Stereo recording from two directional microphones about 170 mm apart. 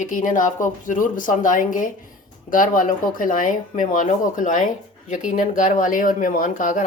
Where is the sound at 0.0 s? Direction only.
50° left (ahead or behind).